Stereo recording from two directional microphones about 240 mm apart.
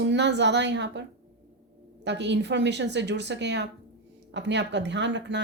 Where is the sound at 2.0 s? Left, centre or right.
Right.